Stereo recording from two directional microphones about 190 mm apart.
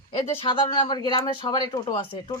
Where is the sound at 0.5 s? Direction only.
25° left (ahead or behind).